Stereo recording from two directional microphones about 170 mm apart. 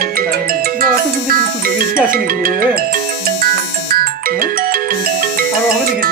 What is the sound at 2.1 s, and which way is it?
Speech, 60° right (ahead or behind).